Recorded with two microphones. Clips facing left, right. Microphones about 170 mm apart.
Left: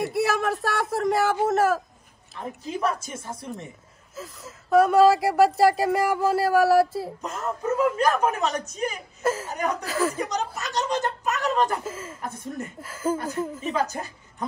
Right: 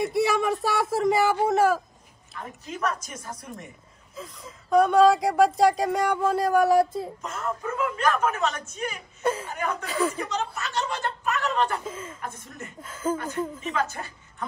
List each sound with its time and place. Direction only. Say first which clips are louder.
0.0 s speech: right 1 dB; centre (ahead or behind)
2.3 s a woman's voice: left 5 dB; 30° left (ahead or behind)
4.1 s speech: left 1 dB; 5° left (ahead or behind)
7.2 s a man's voice: left 1 dB; 40° left (ahead or behind)
9.2 s speech: left 1 dB; 5° left (ahead or behind)
10.7 s a man's voice: left 7 dB; 40° left (ahead or behind)
11.8 s speech: left 1 dB; 5° left (ahead or behind)
13.7 s a man's voice: left 2 dB; 40° left (ahead or behind)